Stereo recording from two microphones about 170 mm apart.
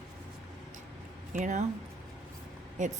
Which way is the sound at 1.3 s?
45° right (ahead or behind).